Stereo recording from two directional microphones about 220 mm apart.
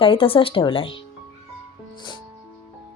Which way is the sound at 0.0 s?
25° left (ahead or behind).